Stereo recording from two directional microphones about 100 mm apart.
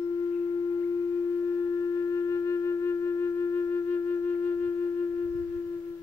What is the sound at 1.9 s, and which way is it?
Flute, 35° left (ahead or behind).